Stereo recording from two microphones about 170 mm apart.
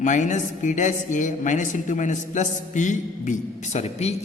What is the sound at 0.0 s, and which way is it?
A woman's voice, 45° left (ahead or behind).